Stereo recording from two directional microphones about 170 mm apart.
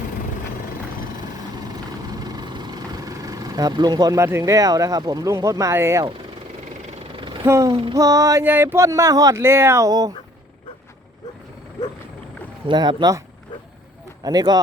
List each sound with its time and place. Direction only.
2.0 s speech: 20° right (ahead or behind)
7.2 s a sound: 30° right (ahead or behind)
7.4 s a sound: 15° right (ahead or behind)
7.9 s speech: 20° right (ahead or behind)
12.6 s speech: 25° right (ahead or behind)
14.3 s speech: 25° right (ahead or behind)